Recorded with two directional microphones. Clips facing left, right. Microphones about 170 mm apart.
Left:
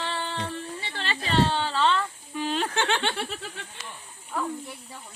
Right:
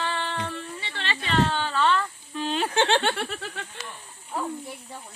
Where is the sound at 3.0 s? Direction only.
55° right (ahead or behind).